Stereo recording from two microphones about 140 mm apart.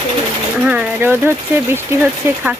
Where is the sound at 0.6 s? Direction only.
10° right (ahead or behind).